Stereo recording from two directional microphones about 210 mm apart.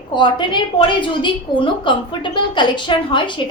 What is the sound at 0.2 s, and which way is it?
A woman's voice, 20° left (ahead or behind).